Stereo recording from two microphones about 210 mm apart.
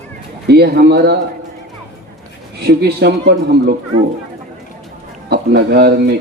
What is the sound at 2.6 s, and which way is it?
Speech, 50° right (ahead or behind).